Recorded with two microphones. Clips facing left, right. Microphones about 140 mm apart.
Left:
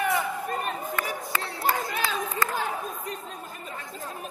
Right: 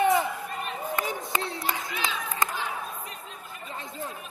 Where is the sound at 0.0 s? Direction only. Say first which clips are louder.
Right 4 dB; 20° right (ahead or behind).